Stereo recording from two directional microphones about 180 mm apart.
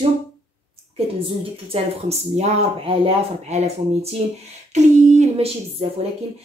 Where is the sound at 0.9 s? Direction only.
30° right (ahead or behind).